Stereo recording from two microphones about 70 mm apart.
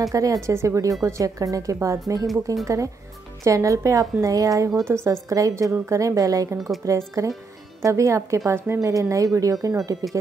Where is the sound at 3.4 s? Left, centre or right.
Right.